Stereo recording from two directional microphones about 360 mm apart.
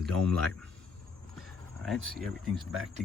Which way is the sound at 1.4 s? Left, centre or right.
Centre.